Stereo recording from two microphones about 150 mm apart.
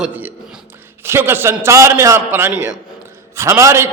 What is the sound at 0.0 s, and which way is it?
A man's voice, 10° right (ahead or behind).